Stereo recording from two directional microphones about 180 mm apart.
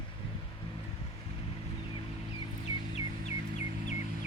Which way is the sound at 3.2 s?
40° left (ahead or behind).